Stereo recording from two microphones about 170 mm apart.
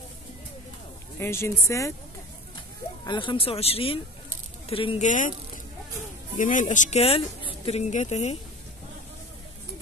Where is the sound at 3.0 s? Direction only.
30° left (ahead or behind).